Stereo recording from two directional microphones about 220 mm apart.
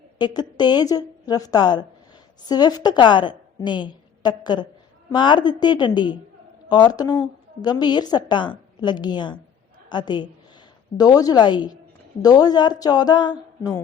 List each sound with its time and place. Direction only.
0.2 s a woman's voice: 20° left (ahead or behind)